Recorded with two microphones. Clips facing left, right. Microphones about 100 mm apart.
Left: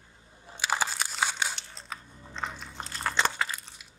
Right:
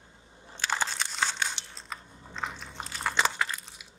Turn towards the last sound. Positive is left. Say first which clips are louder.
# right 1 dB
turn(degrees=0)  # may be behind; listen again after turning